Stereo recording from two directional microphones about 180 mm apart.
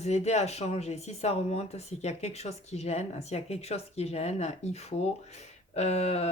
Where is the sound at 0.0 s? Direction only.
35° left (ahead or behind).